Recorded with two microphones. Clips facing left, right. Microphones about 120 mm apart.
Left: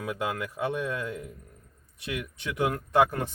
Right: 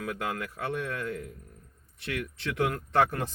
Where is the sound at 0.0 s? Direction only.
20° left (ahead or behind).